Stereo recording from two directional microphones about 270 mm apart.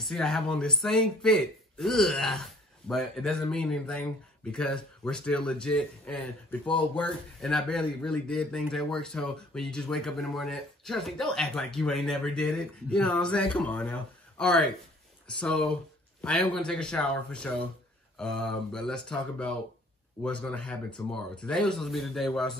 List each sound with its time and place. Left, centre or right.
0.0 s speech: centre